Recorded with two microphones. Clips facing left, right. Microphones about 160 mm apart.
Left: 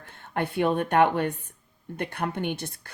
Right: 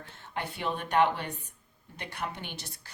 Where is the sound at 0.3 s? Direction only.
55° left (ahead or behind).